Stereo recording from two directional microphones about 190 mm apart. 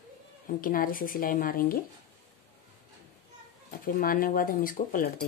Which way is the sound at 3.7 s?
50° left (ahead or behind).